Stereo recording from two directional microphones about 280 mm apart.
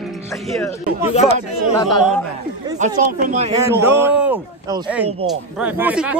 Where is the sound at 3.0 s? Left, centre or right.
Right.